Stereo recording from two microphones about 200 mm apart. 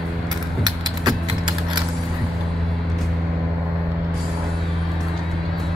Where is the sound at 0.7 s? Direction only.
20° right (ahead or behind).